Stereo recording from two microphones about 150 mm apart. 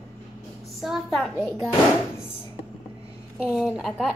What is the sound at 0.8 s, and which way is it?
Speech, centre (ahead or behind).